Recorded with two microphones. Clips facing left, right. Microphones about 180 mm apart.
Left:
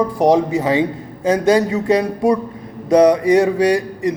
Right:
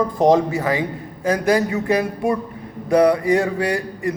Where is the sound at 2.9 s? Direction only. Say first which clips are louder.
Left 4 dB; 20° left (ahead or behind).